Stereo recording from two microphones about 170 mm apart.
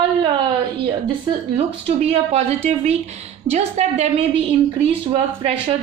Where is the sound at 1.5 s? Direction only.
35° right (ahead or behind).